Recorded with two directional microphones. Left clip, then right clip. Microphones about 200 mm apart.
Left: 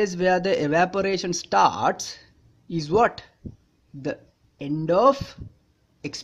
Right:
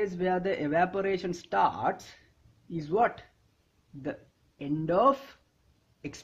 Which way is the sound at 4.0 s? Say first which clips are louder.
Left 7 dB; 15° left (ahead or behind).